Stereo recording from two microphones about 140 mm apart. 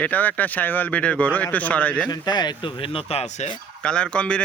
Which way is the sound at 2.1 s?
30° left (ahead or behind).